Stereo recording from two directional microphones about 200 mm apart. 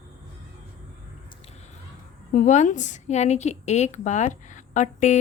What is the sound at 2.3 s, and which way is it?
A woman's voice, 35° left (ahead or behind).